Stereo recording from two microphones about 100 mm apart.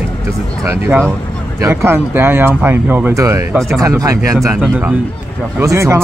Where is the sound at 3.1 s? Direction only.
30° right (ahead or behind).